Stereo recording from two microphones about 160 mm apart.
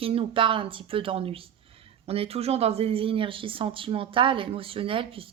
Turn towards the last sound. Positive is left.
turn(degrees=-35)  # may be behind; listen again after turning